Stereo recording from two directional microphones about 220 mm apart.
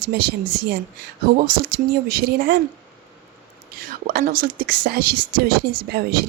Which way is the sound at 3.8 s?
40° right (ahead or behind).